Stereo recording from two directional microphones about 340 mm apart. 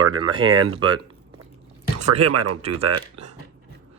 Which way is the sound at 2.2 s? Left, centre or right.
Right.